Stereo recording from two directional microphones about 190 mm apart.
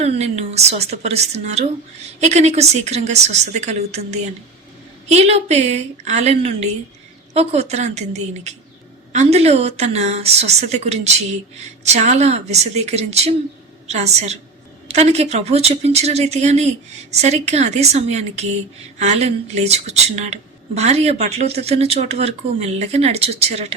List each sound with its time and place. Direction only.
0.0 s speech: 35° right (ahead or behind)